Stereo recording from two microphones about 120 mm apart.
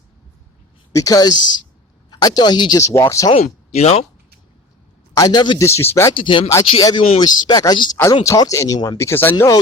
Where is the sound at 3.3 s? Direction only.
60° left (ahead or behind).